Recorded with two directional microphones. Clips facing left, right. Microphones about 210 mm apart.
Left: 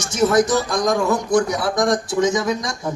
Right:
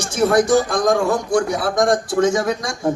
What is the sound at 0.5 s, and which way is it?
Speech, 50° right (ahead or behind).